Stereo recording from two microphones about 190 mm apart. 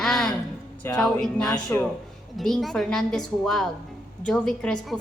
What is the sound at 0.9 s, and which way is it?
A woman's voice, 5° left (ahead or behind).